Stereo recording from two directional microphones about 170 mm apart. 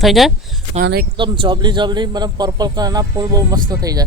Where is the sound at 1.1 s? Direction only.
30° right (ahead or behind).